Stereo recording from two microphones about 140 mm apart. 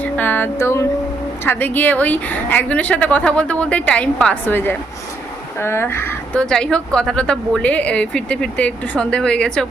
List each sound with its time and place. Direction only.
0.0 s a sound: 10° left (ahead or behind)
1.5 s a woman's voice: 10° left (ahead or behind)
6.4 s a woman's voice: 5° left (ahead or behind)